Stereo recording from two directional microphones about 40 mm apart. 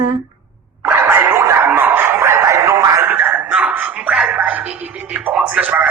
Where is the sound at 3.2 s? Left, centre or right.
Right.